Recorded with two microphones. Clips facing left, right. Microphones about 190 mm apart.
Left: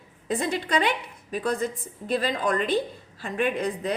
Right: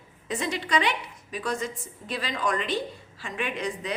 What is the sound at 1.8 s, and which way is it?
Speech, 50° left (ahead or behind).